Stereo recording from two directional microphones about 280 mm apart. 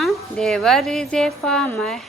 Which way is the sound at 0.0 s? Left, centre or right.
Centre.